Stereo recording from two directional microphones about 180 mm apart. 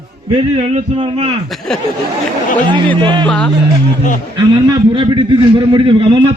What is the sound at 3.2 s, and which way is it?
Speech, 5° left (ahead or behind).